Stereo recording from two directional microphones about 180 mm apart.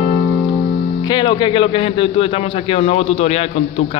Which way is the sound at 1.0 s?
25° left (ahead or behind).